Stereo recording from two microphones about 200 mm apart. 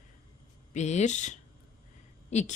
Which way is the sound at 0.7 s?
35° left (ahead or behind).